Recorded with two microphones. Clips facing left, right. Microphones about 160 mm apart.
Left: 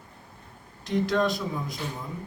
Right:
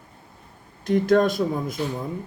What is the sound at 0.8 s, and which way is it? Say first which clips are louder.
Speech: right 6 dB; 50° right (ahead or behind).